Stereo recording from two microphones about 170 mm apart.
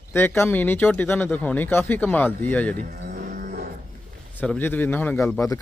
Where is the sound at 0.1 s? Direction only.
15° left (ahead or behind).